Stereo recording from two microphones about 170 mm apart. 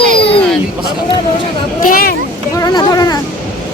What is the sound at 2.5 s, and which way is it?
Speech, 20° left (ahead or behind).